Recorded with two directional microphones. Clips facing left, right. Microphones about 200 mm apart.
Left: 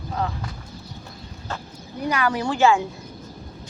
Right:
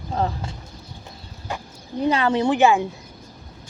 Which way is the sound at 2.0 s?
25° right (ahead or behind).